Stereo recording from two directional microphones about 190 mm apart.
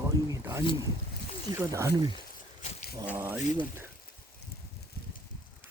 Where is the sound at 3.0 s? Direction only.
10° right (ahead or behind).